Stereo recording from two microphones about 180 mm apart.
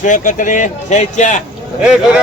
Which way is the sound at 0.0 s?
45° left (ahead or behind).